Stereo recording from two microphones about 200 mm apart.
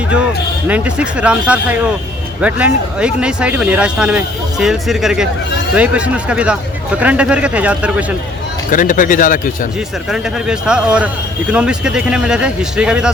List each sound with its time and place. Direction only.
0.7 s speech: 5° right (ahead or behind)
8.7 s speech: 45° left (ahead or behind)
10.1 s speech: centre (ahead or behind)